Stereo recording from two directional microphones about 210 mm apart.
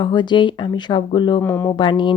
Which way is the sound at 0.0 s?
20° left (ahead or behind).